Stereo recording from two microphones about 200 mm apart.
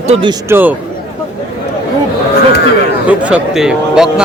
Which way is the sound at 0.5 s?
10° right (ahead or behind).